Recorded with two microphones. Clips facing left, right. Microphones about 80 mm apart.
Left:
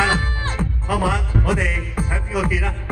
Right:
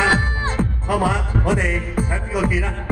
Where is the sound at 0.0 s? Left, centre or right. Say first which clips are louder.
Right 2 dB; centre.